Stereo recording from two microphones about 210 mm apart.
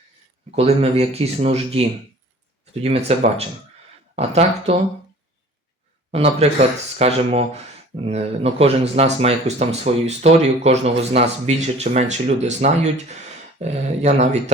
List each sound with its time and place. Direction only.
0.5 s speech: 30° right (ahead or behind)
2.8 s speech: 30° right (ahead or behind)
6.1 s speech: 30° right (ahead or behind)